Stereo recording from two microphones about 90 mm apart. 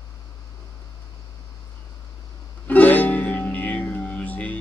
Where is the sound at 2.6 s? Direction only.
20° left (ahead or behind).